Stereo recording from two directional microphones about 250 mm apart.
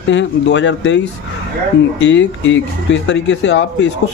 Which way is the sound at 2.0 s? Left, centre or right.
Left.